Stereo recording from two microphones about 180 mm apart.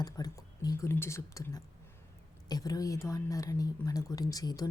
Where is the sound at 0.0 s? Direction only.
20° left (ahead or behind).